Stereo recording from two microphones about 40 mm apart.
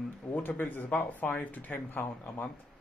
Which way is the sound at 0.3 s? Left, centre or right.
Left.